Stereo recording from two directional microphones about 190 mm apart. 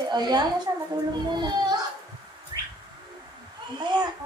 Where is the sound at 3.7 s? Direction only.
20° right (ahead or behind).